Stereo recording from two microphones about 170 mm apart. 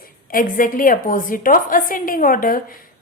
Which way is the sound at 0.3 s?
55° left (ahead or behind).